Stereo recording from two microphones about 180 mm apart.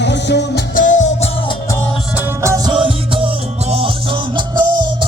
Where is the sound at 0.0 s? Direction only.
75° left (ahead or behind).